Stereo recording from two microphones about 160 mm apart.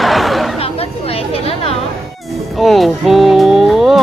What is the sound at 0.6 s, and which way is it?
Chatter, 40° left (ahead or behind).